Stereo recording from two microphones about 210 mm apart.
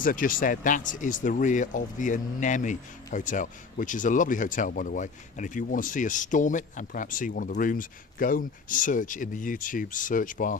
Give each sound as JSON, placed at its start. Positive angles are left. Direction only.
{"t": 0.0, "sound": "speech", "side_deg": 40}